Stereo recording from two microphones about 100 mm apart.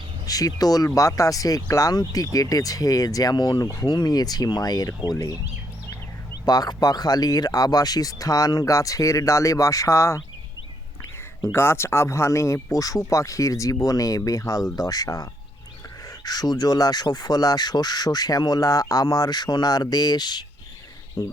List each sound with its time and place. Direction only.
0.3 s speech: 35° left (ahead or behind)
6.4 s speech: 40° left (ahead or behind)
11.5 s speech: 25° left (ahead or behind)